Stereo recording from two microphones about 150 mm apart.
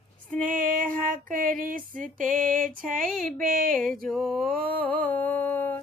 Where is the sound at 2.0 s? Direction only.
65° right (ahead or behind).